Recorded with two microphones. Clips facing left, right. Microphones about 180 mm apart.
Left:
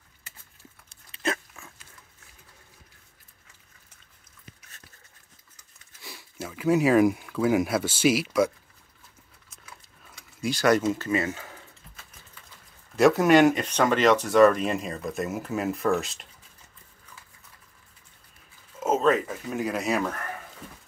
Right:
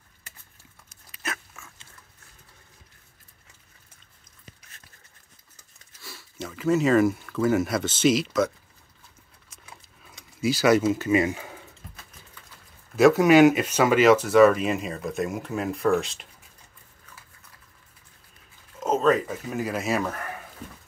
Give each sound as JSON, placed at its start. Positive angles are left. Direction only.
{"t": 0.8, "sound": "dog", "side_deg": 30}
{"t": 6.3, "sound": "speech", "side_deg": 5}
{"t": 10.4, "sound": "speech", "side_deg": -5}
{"t": 12.9, "sound": "speech", "side_deg": 0}
{"t": 18.8, "sound": "speech", "side_deg": 5}